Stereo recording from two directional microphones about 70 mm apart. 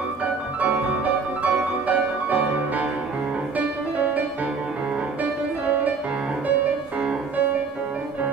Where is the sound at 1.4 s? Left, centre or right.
Right.